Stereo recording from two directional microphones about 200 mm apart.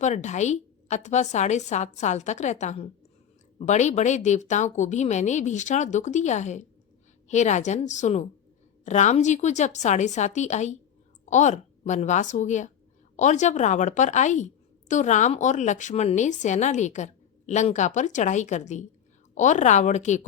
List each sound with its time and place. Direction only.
0.0 s a woman's voice: 35° left (ahead or behind)